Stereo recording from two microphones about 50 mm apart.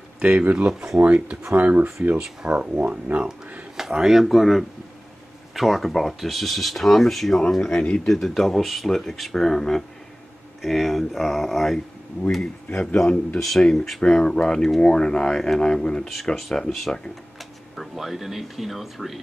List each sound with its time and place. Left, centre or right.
0.2 s speech: right
3.7 s speech: centre
7.7 s speech: left
8.1 s speech: centre
12.8 s speech: centre
17.7 s speech: centre